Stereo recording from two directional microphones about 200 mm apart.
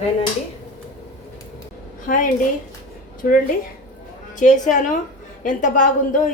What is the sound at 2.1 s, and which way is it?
A woman's voice, 45° left (ahead or behind).